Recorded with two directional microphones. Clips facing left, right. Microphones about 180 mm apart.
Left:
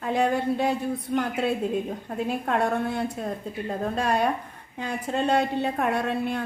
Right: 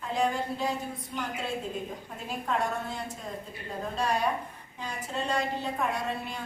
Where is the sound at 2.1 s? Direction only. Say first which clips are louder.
Left 6 dB; 65° left (ahead or behind).